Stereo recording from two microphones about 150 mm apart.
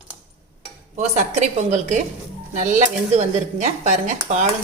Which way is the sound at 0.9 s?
55° right (ahead or behind).